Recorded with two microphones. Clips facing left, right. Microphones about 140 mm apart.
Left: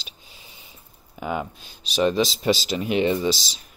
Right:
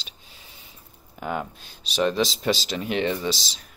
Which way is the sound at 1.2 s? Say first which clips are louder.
Left 2 dB; 5° left (ahead or behind).